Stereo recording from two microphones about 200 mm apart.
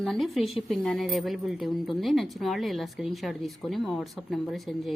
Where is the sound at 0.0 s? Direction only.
Centre (ahead or behind).